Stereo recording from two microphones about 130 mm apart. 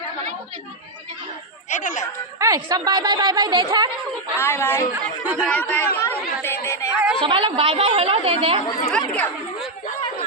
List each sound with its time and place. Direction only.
1.7 s speech: 70° left (ahead or behind)
2.4 s a woman's voice: 30° right (ahead or behind)
4.4 s speech: 20° left (ahead or behind)
5.2 s speech: 15° right (ahead or behind)
5.5 s speech: 10° left (ahead or behind)
6.0 s chatter: 20° left (ahead or behind)
7.2 s a woman's voice: 40° right (ahead or behind)
8.9 s speech: 5° left (ahead or behind)